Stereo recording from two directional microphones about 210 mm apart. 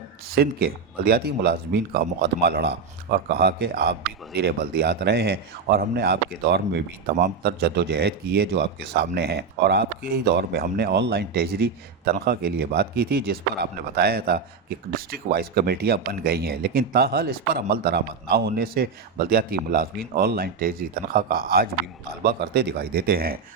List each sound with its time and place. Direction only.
0.3 s a man's voice: 45° right (ahead or behind)